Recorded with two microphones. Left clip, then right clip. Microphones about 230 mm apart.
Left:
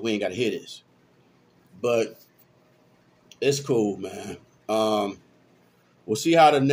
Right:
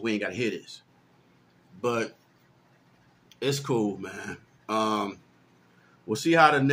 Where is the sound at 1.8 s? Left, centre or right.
Centre.